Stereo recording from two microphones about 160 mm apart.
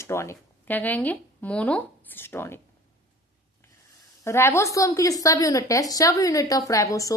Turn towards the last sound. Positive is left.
turn(degrees=20)  # may be behind; listen again after turning